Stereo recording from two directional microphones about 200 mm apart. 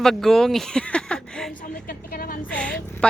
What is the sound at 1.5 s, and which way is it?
Speech, 40° left (ahead or behind).